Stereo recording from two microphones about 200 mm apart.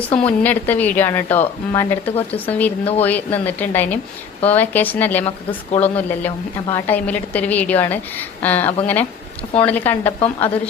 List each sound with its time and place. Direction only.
0.3 s a woman's voice: 10° left (ahead or behind)
5.2 s speech: 25° left (ahead or behind)
5.8 s a woman's voice: 10° left (ahead or behind)